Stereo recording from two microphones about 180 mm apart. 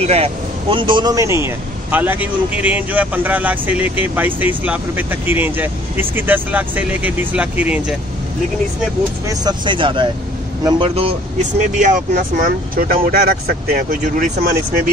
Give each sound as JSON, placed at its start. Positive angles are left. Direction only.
{"t": 0.0, "sound": "speech", "side_deg": -35}
{"t": 9.3, "sound": "speech", "side_deg": -20}
{"t": 11.8, "sound": "speech", "side_deg": -45}